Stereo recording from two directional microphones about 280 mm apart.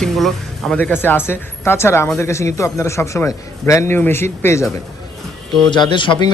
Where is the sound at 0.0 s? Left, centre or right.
Centre.